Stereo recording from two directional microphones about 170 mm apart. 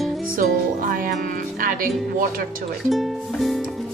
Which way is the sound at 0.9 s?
55° right (ahead or behind).